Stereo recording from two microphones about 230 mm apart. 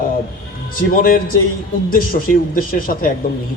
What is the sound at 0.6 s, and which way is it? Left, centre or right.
A man's voice, left.